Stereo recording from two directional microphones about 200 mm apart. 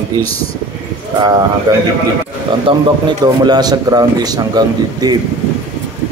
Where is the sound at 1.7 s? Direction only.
20° right (ahead or behind).